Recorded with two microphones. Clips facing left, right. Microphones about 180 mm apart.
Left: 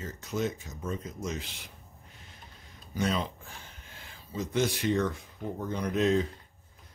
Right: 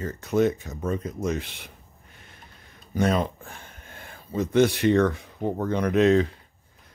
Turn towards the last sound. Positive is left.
turn(degrees=-75)  # may be behind; listen again after turning